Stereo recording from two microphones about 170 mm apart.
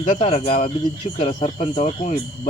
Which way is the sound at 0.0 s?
45° left (ahead or behind).